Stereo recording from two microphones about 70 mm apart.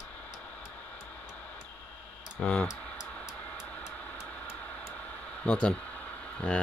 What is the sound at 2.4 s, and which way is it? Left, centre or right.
Speech, centre.